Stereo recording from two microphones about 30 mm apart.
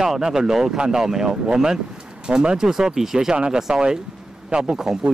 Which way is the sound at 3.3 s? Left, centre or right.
Right.